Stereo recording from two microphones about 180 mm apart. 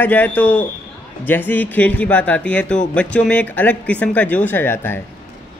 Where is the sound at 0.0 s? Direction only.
10° left (ahead or behind).